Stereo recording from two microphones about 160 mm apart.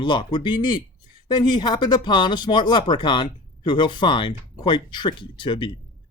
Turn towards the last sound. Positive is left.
turn(degrees=30)  # may be behind; listen again after turning